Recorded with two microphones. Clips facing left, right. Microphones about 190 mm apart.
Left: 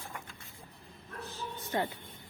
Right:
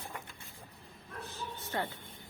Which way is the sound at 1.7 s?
15° left (ahead or behind).